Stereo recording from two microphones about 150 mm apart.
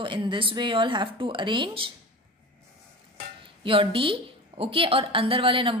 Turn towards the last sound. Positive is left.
turn(degrees=-35)  # may be behind; listen again after turning